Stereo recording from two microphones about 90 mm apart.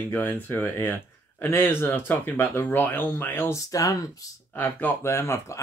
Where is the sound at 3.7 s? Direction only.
40° left (ahead or behind).